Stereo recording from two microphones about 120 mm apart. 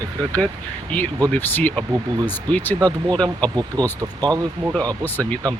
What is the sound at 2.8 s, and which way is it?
Speech, 30° right (ahead or behind).